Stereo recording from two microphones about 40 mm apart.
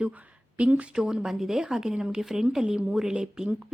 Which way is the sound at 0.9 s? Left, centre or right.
Centre.